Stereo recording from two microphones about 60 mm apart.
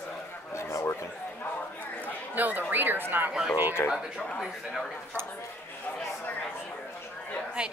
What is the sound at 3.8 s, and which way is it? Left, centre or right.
Speech, left.